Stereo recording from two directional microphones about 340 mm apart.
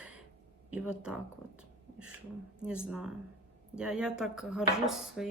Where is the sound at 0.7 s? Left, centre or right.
Centre.